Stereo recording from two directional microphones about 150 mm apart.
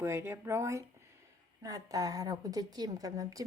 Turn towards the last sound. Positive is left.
turn(degrees=-20)  # may be behind; listen again after turning